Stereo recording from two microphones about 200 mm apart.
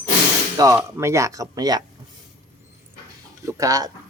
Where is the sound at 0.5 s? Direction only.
15° right (ahead or behind).